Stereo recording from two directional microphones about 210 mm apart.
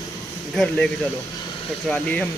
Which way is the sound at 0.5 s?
5° left (ahead or behind).